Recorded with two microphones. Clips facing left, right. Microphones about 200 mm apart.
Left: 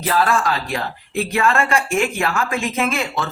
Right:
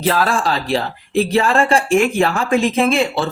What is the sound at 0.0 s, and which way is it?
Speech, 30° right (ahead or behind).